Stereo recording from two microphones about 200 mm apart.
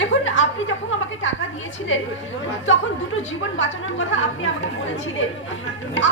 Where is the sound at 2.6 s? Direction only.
75° left (ahead or behind).